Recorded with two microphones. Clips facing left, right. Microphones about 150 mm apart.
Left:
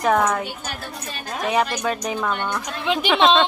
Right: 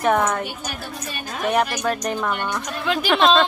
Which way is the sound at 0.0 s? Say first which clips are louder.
Even; centre (ahead or behind).